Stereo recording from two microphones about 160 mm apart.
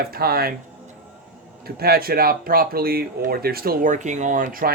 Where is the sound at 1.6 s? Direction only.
70° right (ahead or behind).